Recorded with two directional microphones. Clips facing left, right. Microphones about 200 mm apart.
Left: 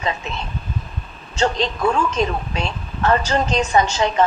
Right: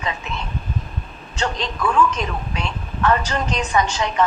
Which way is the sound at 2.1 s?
25° left (ahead or behind).